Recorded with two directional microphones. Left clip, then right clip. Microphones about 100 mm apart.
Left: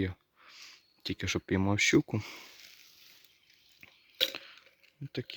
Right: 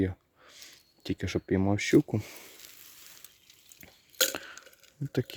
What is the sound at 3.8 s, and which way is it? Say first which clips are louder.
Chewing: even; 50° right (ahead or behind).